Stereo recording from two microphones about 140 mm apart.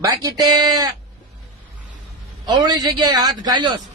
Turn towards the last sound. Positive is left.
turn(degrees=-30)  # may be behind; listen again after turning